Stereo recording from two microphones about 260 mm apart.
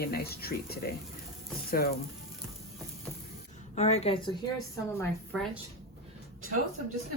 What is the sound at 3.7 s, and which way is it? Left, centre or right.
Speech, left.